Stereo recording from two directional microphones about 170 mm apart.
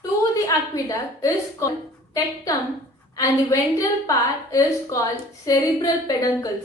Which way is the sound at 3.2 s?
20° left (ahead or behind).